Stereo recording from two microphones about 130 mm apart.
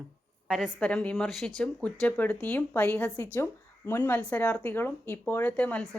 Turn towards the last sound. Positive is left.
turn(degrees=10)  # may be behind; listen again after turning